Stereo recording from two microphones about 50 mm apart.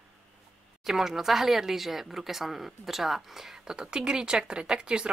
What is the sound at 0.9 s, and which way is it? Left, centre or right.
Speech, centre.